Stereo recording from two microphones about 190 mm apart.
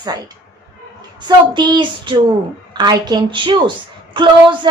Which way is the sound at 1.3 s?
25° right (ahead or behind).